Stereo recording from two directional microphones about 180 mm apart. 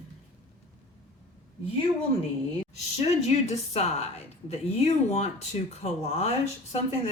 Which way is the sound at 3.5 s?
35° left (ahead or behind).